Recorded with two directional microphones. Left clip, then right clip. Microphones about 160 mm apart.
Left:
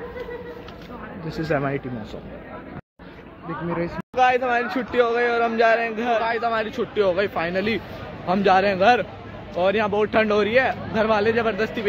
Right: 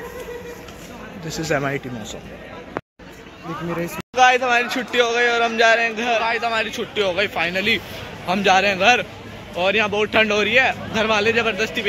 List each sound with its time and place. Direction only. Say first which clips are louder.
1.3 s speech: right 2 dB; 5° right (ahead or behind)
4.1 s a sound: right 4 dB; 5° right (ahead or behind)
4.4 s speech: right 4 dB; 10° left (ahead or behind)
4.6 s a man's voice: right 1 dB; 25° left (ahead or behind)